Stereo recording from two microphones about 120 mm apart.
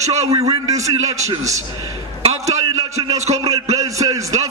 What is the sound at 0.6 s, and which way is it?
Speech, 25° right (ahead or behind).